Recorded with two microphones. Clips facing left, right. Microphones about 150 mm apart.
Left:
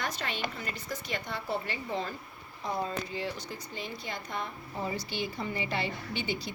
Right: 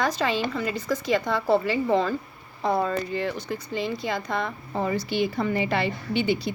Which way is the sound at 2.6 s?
70° right (ahead or behind).